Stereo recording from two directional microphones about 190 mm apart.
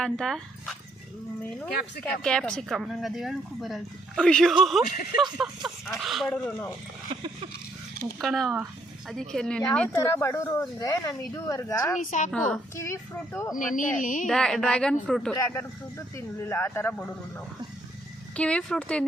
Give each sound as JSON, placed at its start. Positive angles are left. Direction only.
{"t": 0.0, "sound": "speech", "side_deg": 5}
{"t": 2.2, "sound": "speech", "side_deg": 5}
{"t": 7.1, "sound": "a sound", "side_deg": -25}
{"t": 8.2, "sound": "speech", "side_deg": 0}
{"t": 11.9, "sound": "a woman's voice", "side_deg": 40}
{"t": 12.7, "sound": "speech", "side_deg": 15}
{"t": 13.6, "sound": "speech", "side_deg": 45}
{"t": 14.3, "sound": "speech", "side_deg": 5}
{"t": 15.3, "sound": "speech", "side_deg": 15}